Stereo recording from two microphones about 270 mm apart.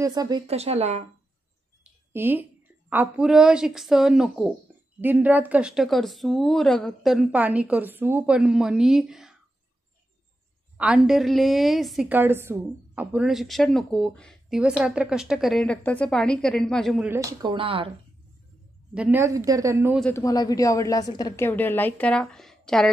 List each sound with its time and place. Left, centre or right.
0.0 s speech: centre
2.1 s a woman's voice: centre
10.8 s a woman's voice: centre
18.9 s speech: centre
20.0 s a woman's voice: centre